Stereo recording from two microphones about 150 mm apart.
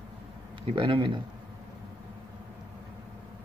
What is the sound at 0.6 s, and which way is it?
Speech, 35° right (ahead or behind).